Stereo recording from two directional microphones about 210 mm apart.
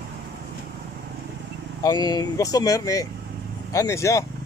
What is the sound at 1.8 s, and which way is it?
Speech, 20° left (ahead or behind).